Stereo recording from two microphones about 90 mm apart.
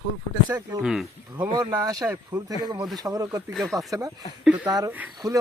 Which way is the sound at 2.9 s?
45° right (ahead or behind).